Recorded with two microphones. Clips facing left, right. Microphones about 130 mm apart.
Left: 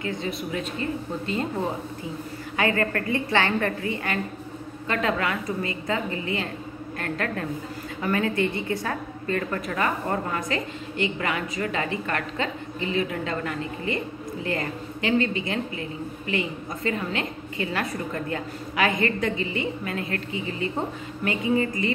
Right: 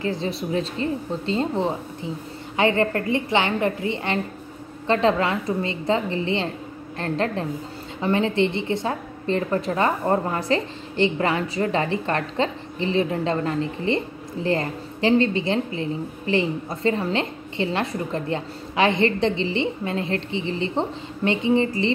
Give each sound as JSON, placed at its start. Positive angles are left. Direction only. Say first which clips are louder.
{"t": 0.0, "sound": "a woman's voice", "louder": "right 4 dB", "side_deg": -30}